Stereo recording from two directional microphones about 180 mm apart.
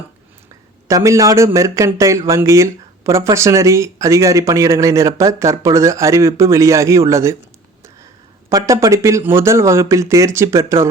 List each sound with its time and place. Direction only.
0.9 s speech: 15° right (ahead or behind)
8.4 s speech: 15° right (ahead or behind)